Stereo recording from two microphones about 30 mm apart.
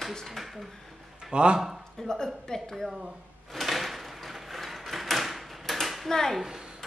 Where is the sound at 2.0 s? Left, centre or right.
Centre.